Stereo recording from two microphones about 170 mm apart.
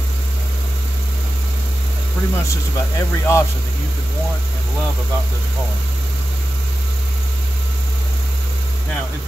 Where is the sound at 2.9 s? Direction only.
15° left (ahead or behind).